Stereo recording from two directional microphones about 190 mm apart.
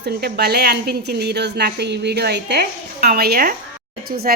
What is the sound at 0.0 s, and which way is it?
A woman's voice, 60° right (ahead or behind).